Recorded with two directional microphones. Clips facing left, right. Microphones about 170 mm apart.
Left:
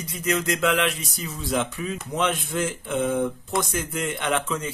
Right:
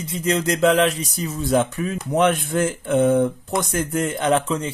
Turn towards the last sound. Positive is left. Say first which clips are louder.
# right 6 dB
turn(degrees=-35)  # may be behind; listen again after turning